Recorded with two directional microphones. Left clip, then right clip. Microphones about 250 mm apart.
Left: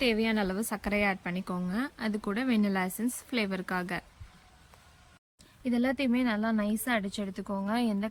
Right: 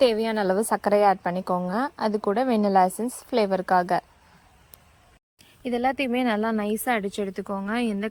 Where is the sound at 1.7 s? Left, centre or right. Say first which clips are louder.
Right 9 dB; centre.